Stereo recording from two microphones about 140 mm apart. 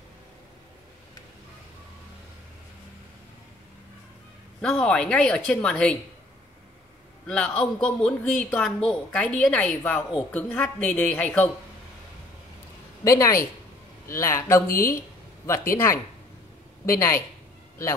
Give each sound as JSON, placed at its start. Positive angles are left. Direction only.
{"t": 4.6, "sound": "a woman's voice", "side_deg": 5}
{"t": 7.2, "sound": "a woman's voice", "side_deg": 5}
{"t": 13.0, "sound": "a man's voice", "side_deg": 20}
{"t": 14.7, "sound": "speech", "side_deg": 90}
{"t": 16.8, "sound": "a woman's voice", "side_deg": 15}